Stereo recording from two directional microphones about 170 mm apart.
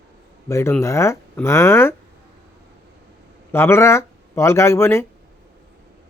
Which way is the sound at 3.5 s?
15° left (ahead or behind).